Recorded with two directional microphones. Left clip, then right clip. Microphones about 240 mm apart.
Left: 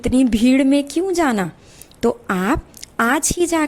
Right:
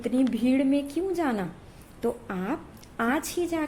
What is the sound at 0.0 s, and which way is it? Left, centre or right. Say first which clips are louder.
A woman's voice: left 9 dB; left.